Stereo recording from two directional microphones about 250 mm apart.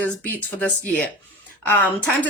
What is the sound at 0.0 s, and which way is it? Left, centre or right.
A woman's voice, centre.